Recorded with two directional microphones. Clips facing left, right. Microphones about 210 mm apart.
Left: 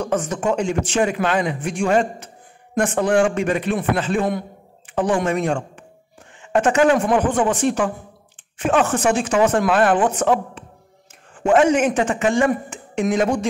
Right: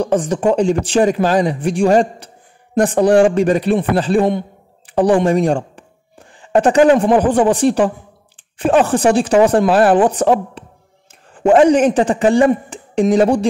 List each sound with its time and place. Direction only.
0.0 s speech: 35° right (ahead or behind)